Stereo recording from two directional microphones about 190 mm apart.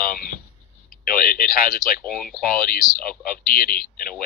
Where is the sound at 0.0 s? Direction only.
50° left (ahead or behind).